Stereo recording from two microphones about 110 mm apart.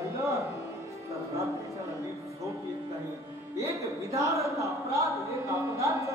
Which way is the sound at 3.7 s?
30° right (ahead or behind).